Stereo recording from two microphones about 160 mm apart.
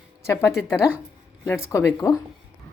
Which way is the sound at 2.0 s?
20° left (ahead or behind).